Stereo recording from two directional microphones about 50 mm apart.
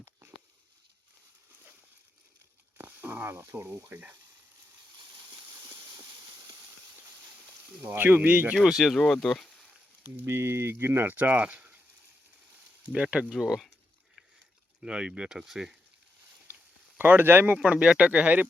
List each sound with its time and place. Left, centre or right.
0.0 s a sound: right
2.7 s a sound: right
3.8 s speech: right
7.8 s speech: right
8.3 s speech: right
8.5 s speech: centre
9.0 s speech: centre
10.2 s speech: right
11.2 s speech: right
12.9 s speech: centre
13.3 s speech: centre
14.8 s speech: centre
17.0 s speech: right
17.7 s speech: right